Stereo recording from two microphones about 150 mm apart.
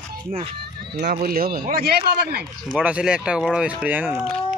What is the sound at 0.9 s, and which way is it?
Speech, 80° right.